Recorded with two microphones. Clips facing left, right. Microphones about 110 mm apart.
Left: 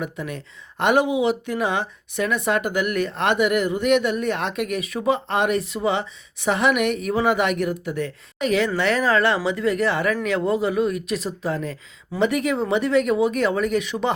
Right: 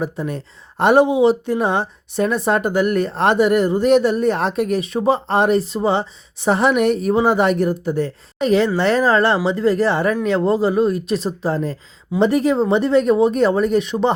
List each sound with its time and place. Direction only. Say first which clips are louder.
0.0 s speech: right 6 dB; 35° right (ahead or behind)